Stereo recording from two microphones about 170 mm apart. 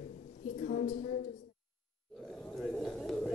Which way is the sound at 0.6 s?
50° left (ahead or behind).